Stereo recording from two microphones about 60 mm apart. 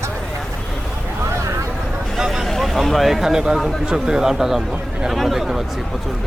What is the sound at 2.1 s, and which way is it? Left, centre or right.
Vehicle, centre.